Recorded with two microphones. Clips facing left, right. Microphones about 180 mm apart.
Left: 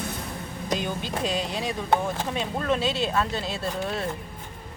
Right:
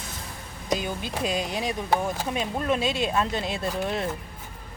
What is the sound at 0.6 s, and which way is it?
Speech, 10° right (ahead or behind).